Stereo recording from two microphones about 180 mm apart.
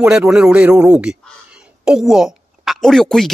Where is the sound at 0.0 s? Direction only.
5° right (ahead or behind).